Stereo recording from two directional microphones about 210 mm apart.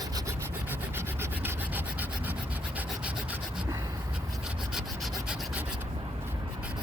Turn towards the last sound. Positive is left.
turn(degrees=-10)  # may be behind; listen again after turning